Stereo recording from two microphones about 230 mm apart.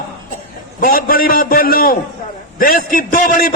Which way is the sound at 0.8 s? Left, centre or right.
Left.